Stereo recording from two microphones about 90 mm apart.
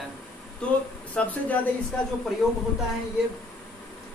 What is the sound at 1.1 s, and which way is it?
Speech, 20° left (ahead or behind).